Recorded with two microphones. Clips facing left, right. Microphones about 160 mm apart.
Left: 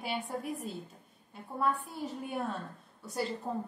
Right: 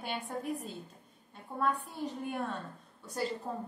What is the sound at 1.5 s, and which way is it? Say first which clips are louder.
Speech: left 1 dB; 5° left (ahead or behind).